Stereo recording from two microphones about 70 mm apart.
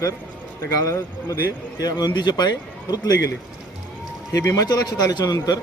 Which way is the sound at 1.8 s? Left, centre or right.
Left.